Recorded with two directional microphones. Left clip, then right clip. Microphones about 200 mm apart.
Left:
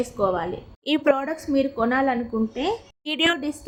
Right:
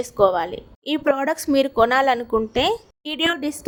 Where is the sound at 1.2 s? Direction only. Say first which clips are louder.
Right 4 dB; 50° right (ahead or behind).